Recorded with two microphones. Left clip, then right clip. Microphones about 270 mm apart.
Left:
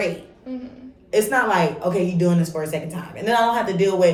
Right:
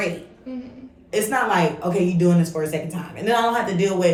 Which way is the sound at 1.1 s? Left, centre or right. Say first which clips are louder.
Left 2 dB; centre.